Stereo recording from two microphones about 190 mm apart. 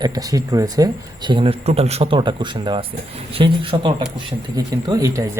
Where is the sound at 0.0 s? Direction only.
20° right (ahead or behind).